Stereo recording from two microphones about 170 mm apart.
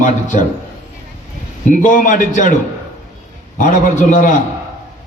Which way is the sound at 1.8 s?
50° left (ahead or behind).